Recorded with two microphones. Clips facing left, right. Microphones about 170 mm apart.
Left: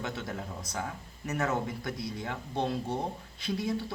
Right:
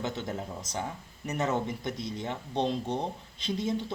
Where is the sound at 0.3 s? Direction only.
20° right (ahead or behind).